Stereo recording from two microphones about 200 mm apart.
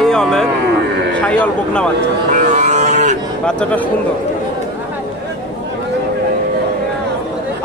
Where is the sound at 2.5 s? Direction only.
35° right (ahead or behind).